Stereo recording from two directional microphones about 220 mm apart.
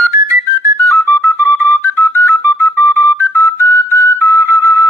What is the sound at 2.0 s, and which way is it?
Whistle, 10° right (ahead or behind).